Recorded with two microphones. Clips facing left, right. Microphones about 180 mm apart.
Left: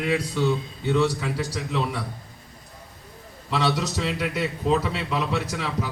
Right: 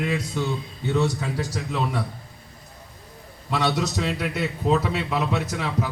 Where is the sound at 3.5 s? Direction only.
45° right (ahead or behind).